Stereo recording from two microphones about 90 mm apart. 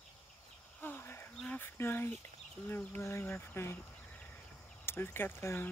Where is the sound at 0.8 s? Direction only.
25° left (ahead or behind).